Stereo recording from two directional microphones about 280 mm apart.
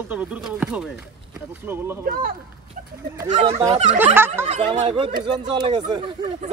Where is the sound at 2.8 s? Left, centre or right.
Right.